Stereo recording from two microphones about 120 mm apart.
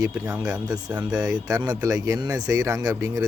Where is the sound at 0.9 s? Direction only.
10° right (ahead or behind).